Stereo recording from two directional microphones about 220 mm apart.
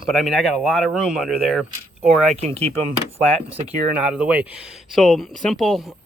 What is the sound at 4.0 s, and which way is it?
Speech, 5° right (ahead or behind).